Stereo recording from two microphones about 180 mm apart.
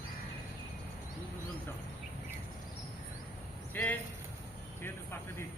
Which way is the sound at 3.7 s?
10° left (ahead or behind).